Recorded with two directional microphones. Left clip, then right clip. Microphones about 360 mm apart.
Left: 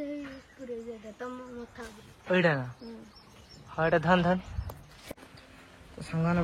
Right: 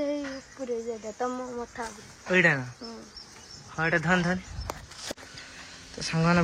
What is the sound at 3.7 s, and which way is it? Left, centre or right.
Speech, centre.